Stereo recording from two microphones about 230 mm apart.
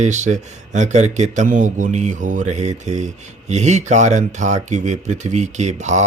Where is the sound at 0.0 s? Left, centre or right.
Right.